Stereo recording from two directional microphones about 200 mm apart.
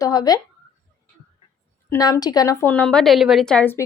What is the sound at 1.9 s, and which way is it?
A woman's voice, 15° left (ahead or behind).